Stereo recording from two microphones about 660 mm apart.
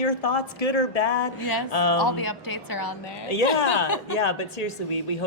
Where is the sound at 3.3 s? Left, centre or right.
Left.